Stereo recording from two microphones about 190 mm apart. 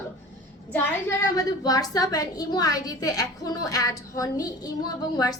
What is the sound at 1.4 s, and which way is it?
A woman's voice, 20° left (ahead or behind).